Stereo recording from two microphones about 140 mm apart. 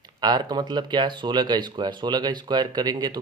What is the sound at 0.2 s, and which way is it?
Speech, 30° right (ahead or behind).